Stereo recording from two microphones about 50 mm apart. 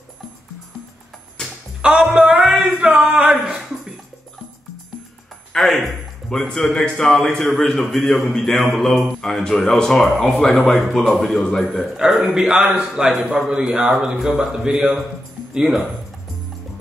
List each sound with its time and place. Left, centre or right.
1.4 s music: centre
1.8 s music: centre
2.2 s a sound: centre
5.5 s a man's voice: centre
12.0 s a man's voice: centre